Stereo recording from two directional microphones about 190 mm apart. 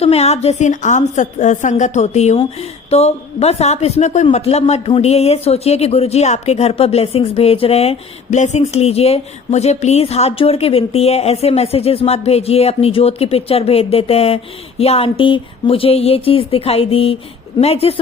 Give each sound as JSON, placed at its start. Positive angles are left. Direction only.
{"t": 0.0, "sound": "a woman's voice", "side_deg": 35}